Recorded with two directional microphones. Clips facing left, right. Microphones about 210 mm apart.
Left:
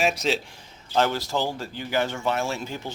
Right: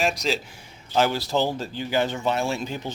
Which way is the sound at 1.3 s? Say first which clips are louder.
Right 3 dB; 20° right (ahead or behind).